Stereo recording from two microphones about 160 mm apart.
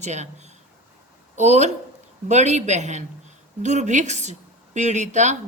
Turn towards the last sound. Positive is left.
turn(degrees=-50)  # may be behind; listen again after turning